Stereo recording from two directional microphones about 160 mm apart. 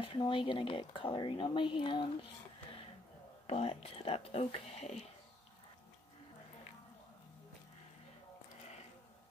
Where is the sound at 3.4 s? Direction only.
40° left (ahead or behind).